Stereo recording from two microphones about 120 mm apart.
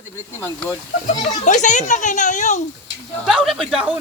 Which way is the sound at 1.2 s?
90° left.